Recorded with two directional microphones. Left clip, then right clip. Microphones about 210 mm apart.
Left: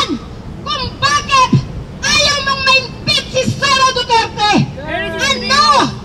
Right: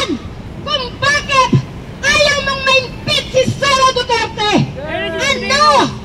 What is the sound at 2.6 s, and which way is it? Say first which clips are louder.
Child singing: left 1 dB; 40° left (ahead or behind).